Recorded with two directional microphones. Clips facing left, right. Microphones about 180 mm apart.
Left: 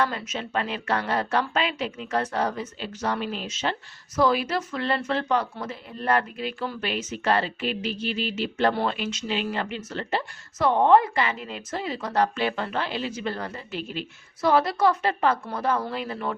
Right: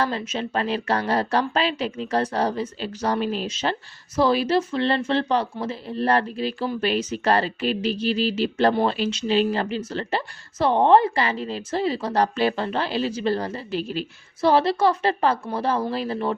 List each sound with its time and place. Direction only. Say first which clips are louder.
0.0 s a woman's voice: right 2 dB; 30° right (ahead or behind)